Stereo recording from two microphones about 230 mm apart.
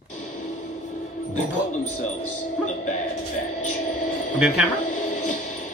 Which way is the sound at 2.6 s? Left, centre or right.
Left.